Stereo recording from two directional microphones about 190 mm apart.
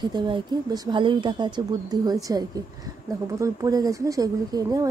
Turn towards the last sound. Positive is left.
turn(degrees=-20)  # may be behind; listen again after turning